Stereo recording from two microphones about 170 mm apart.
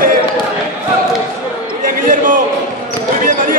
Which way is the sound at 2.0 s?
50° right (ahead or behind).